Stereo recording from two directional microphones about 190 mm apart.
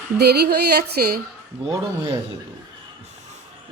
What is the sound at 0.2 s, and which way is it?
Female singing, 60° right (ahead or behind).